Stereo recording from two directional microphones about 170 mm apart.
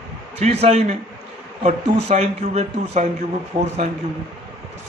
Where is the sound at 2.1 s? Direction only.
40° right (ahead or behind).